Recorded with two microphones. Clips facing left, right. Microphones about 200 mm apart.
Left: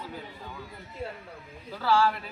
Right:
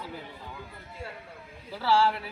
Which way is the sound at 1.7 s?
10° right (ahead or behind).